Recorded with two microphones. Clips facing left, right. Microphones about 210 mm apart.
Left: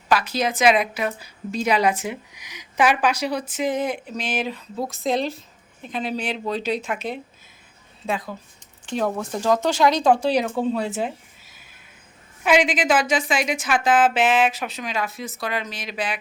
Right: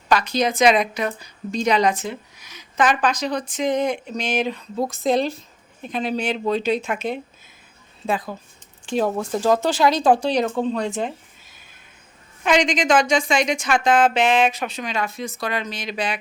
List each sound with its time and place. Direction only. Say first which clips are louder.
0.1 s a woman's voice: right 2 dB; 5° left (ahead or behind)
9.0 s speech: right 3 dB; 30° right (ahead or behind)
10.2 s speech: even; 5° left (ahead or behind)
12.4 s a woman's voice: even; 5° left (ahead or behind)